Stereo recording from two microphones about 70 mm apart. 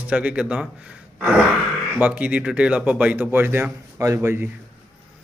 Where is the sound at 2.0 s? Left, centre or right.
Right.